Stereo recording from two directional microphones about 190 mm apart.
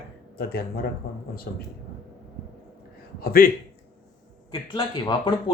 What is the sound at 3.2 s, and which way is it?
Speech, 50° left (ahead or behind).